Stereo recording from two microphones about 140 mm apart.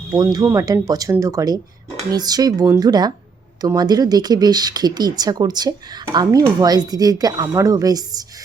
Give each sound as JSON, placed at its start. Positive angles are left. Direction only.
{"t": 0.3, "sound": "speech", "side_deg": -25}